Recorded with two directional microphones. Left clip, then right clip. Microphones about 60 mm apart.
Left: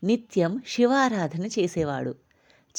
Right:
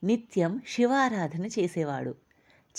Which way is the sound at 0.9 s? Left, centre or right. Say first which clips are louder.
Left 3 dB; left.